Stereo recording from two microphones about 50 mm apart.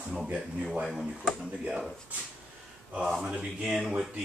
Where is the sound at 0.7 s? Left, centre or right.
Centre.